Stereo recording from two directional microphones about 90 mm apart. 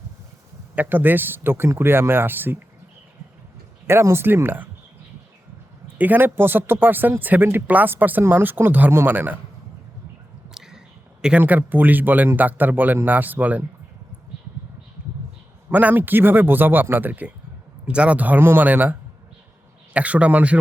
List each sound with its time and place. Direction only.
0.8 s speech: 20° right (ahead or behind)
3.8 s speech: 30° right (ahead or behind)
6.0 s speech: 20° right (ahead or behind)
10.5 s a sound: 5° right (ahead or behind)
11.2 s speech: 15° right (ahead or behind)
15.0 s a sound: 15° right (ahead or behind)
15.7 s speech: 20° right (ahead or behind)